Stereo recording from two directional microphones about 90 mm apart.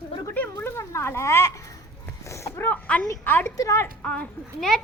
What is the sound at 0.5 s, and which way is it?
Speech, 30° left (ahead or behind).